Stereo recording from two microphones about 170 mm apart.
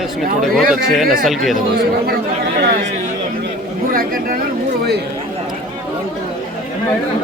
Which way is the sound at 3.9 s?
55° right (ahead or behind).